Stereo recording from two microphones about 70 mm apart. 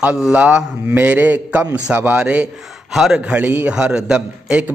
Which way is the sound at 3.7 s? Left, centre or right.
Centre.